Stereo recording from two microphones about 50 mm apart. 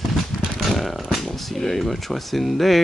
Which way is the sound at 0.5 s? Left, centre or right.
Centre.